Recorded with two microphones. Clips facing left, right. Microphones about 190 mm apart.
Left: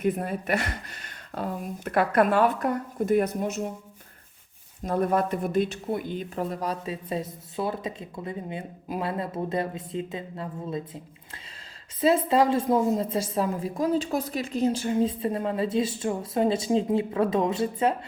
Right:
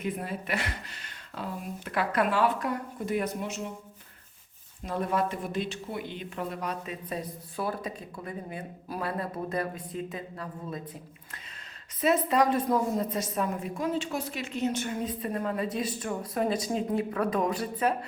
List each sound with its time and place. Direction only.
0.0 s speech: 45° left (ahead or behind)
4.8 s speech: 45° left (ahead or behind); by 17.9 s 25° left (ahead or behind)